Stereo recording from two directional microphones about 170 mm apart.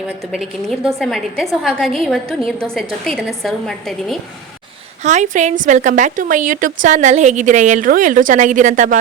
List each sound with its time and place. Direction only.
0.3 s a woman's voice: centre (ahead or behind)
5.0 s a woman's voice: 45° right (ahead or behind)